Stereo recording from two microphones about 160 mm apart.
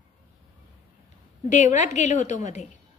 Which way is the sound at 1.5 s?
50° left (ahead or behind).